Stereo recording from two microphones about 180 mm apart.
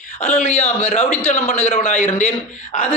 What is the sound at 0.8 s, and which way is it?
A man's voice, 35° left (ahead or behind).